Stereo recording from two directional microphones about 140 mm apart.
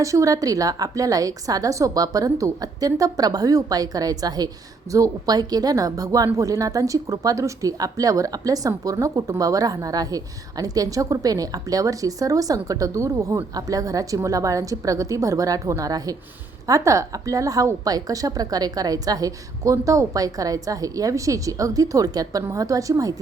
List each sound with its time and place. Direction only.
0.0 s a woman's voice: 25° right (ahead or behind)